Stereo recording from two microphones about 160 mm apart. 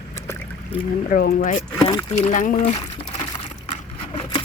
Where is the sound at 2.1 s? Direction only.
50° left (ahead or behind).